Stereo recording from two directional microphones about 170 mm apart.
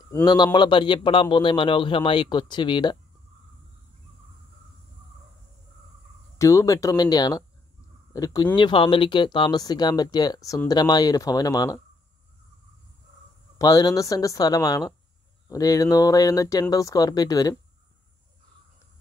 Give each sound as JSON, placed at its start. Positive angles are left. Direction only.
{"t": 0.1, "sound": "speech", "side_deg": 25}
{"t": 6.3, "sound": "speech", "side_deg": 20}
{"t": 13.6, "sound": "speech", "side_deg": 20}